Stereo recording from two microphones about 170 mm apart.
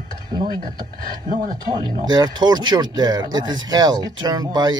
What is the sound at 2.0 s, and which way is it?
Speech, 25° right (ahead or behind).